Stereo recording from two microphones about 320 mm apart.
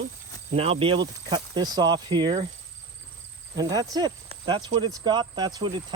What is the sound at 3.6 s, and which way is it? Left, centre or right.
Speech, centre.